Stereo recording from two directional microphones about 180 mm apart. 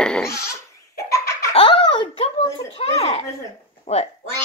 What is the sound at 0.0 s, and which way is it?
Goat, 5° left (ahead or behind).